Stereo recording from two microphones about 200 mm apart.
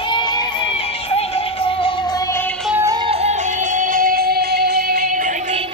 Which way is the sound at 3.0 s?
30° right (ahead or behind).